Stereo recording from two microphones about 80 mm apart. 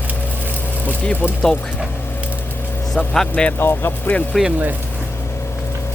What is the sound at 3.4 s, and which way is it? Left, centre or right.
Speech, left.